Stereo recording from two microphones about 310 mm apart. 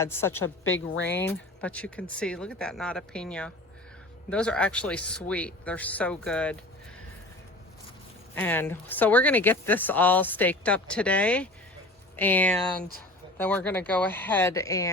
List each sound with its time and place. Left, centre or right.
0.0 s speech: centre
0.3 s speech: left
1.1 s speech: centre
8.4 s speech: centre